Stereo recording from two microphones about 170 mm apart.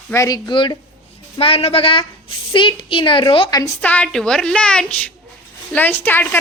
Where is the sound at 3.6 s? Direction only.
10° left (ahead or behind).